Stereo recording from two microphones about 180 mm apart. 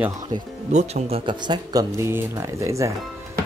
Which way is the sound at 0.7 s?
35° right (ahead or behind).